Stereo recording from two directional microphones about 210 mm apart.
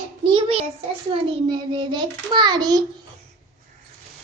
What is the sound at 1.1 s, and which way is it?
A child's voice, 25° right (ahead or behind).